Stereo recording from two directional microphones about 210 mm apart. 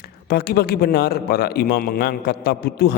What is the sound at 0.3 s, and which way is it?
A man's voice, 50° left (ahead or behind).